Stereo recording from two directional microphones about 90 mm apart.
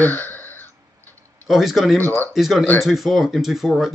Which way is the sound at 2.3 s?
Centre (ahead or behind).